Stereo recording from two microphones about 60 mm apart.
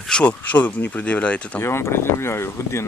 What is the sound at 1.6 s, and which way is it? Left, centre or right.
Speech, left.